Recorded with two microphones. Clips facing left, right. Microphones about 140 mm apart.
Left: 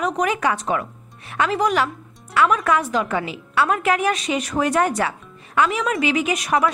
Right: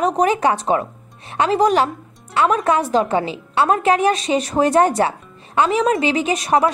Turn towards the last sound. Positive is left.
turn(degrees=-30)  # may be behind; listen again after turning